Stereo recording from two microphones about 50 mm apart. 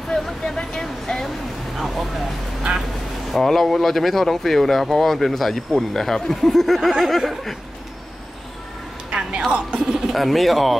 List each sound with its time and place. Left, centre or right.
0.1 s a sound: centre
1.8 s speech: centre
3.3 s speech: centre
9.5 s speech: right
9.9 s speech: centre